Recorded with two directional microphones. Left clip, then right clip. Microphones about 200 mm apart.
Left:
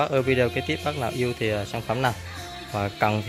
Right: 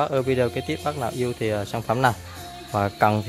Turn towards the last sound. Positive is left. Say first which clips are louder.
# right 4 dB
turn(degrees=-15)  # may be behind; listen again after turning